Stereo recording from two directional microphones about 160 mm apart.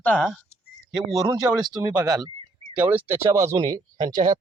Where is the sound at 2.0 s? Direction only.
25° right (ahead or behind).